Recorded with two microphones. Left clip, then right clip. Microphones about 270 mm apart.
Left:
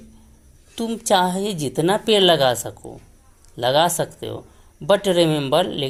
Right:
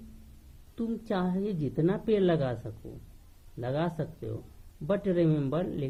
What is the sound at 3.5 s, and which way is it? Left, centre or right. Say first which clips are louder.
A woman's voice: left 15 dB; centre.